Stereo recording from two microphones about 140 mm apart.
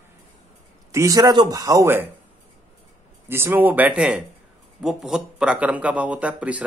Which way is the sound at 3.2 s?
15° right (ahead or behind).